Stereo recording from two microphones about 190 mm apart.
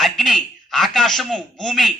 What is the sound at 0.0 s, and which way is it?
A man's voice, centre (ahead or behind).